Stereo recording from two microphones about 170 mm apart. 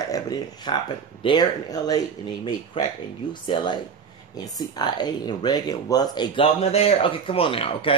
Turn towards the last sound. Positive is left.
turn(degrees=30)  # may be behind; listen again after turning